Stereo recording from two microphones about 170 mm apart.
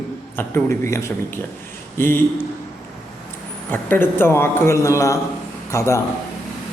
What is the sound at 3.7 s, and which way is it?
A man's voice, 10° left (ahead or behind).